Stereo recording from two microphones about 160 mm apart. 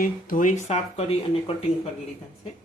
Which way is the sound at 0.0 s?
60° left (ahead or behind).